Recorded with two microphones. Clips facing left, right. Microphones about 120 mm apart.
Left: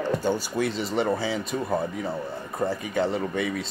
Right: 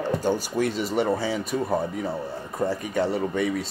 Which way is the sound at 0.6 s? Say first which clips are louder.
Right 2 dB; 45° right (ahead or behind).